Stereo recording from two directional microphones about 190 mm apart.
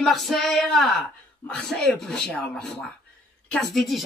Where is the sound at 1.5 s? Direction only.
5° left (ahead or behind).